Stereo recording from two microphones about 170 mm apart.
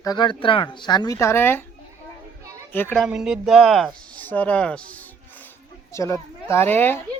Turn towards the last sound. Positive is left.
turn(degrees=10)  # may be behind; listen again after turning